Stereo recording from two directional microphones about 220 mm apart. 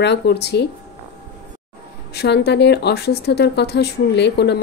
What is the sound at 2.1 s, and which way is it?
A woman's voice, 50° left (ahead or behind).